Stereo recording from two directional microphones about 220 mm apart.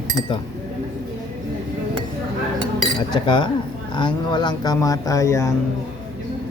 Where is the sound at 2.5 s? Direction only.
20° left (ahead or behind).